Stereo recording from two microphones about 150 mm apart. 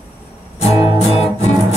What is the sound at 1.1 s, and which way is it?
Music, 45° left (ahead or behind).